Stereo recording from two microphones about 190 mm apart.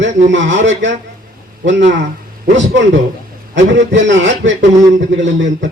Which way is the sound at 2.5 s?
75° right (ahead or behind).